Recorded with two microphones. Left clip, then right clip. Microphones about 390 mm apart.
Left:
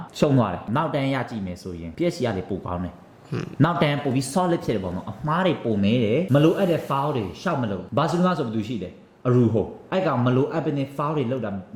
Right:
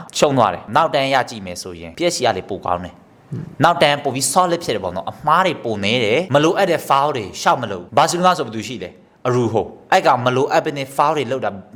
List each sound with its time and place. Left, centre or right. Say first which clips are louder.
0.1 s speech: right 8 dB; right